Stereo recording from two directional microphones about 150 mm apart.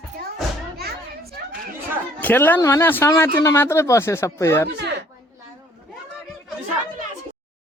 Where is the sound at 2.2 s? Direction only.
10° left (ahead or behind).